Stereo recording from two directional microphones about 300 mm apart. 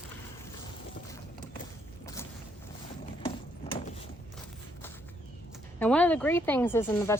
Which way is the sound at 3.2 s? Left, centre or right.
Centre.